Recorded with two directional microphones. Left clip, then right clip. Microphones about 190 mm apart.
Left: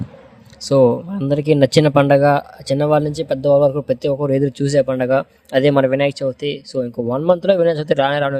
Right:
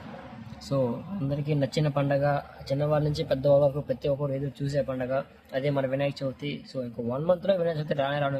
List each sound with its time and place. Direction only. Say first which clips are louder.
0.7 s speech: left 15 dB; 55° left (ahead or behind)